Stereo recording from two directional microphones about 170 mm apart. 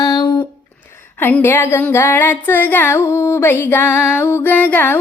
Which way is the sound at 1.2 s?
10° left (ahead or behind).